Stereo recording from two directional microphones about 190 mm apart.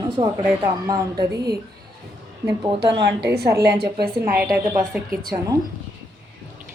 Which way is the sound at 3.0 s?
65° right (ahead or behind).